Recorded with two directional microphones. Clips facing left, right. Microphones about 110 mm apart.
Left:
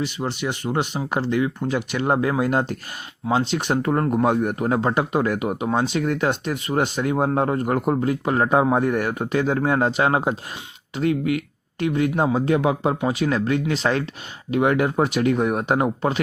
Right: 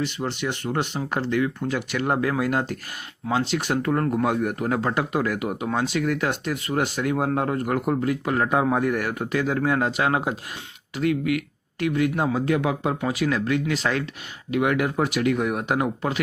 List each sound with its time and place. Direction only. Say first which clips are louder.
0.0 s speech: left 1 dB; 15° left (ahead or behind); by 16.2 s 30° left (ahead or behind)